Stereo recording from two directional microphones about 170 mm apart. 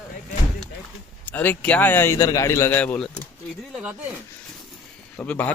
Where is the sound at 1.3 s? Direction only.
10° left (ahead or behind); by 4.1 s 5° right (ahead or behind).